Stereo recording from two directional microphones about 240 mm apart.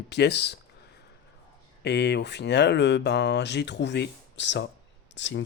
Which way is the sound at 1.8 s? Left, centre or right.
Left.